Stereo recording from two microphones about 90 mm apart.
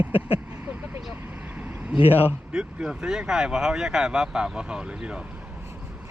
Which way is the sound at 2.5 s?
10° right (ahead or behind).